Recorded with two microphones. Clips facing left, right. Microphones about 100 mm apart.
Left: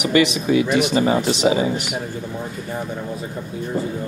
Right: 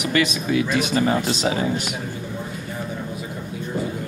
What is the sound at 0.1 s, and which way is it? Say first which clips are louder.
Speech: left 4 dB; 20° left (ahead or behind).